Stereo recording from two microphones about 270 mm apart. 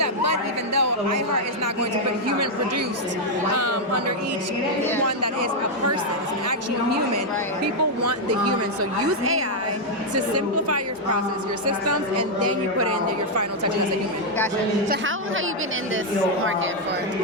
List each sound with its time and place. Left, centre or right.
0.0 s chatter: right
5.0 s a woman's voice: right
8.0 s a woman's voice: right
12.4 s a woman's voice: right